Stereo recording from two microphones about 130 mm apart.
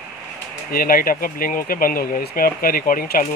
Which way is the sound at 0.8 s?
90° left.